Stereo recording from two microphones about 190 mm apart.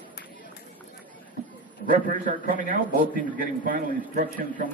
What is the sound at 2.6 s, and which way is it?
A man's voice, 45° right (ahead or behind).